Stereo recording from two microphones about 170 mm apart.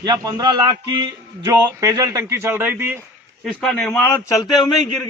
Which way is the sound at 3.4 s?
5° left (ahead or behind).